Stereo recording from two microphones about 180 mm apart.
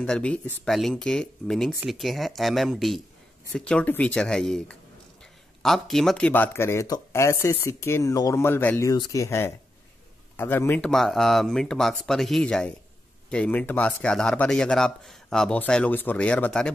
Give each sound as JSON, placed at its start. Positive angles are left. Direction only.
{"t": 0.0, "sound": "a man's voice", "side_deg": 5}